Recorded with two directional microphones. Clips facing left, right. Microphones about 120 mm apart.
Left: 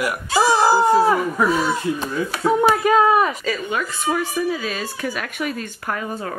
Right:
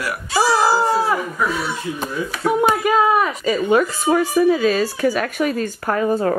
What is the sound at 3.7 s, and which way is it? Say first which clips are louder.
Speech: right 9 dB; 40° right (ahead or behind).